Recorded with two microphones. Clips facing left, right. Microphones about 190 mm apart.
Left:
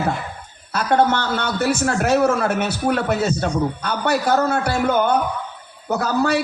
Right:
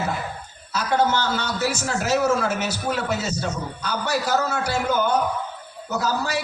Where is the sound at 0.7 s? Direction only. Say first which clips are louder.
Left 4 dB; 60° left (ahead or behind).